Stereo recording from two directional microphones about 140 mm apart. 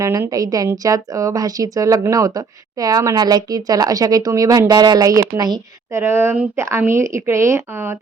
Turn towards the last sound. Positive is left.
turn(degrees=-15)  # may be behind; listen again after turning